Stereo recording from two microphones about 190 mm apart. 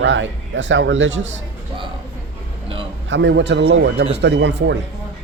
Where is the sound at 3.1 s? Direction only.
70° right (ahead or behind); by 4.1 s 90° right.